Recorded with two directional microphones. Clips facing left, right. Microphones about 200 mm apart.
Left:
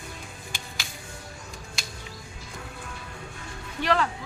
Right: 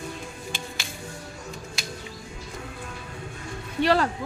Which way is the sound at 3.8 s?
40° right (ahead or behind).